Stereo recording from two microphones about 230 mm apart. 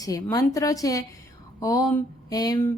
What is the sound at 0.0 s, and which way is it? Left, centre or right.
A woman's voice, centre.